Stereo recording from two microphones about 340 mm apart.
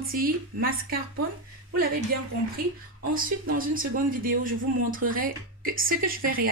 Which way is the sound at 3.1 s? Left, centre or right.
Right.